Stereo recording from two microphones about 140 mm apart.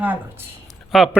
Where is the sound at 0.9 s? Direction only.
Centre (ahead or behind).